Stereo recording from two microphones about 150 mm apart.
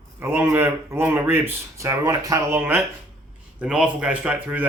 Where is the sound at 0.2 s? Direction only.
15° right (ahead or behind).